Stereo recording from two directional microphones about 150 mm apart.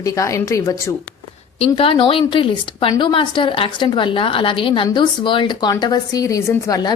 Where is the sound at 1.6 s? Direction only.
40° left (ahead or behind).